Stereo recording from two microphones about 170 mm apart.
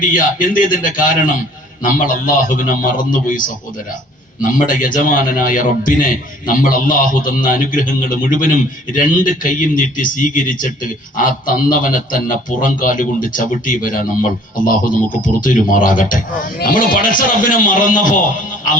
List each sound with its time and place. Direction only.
0.1 s a man's voice: 55° left (ahead or behind)